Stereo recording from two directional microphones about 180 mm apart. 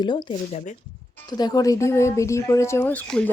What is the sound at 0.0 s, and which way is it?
Speech, 25° left (ahead or behind).